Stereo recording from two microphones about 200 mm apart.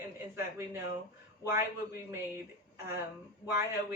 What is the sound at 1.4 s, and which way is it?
Speech, 15° right (ahead or behind).